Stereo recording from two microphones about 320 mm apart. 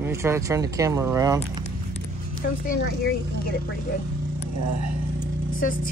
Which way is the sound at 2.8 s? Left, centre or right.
Left.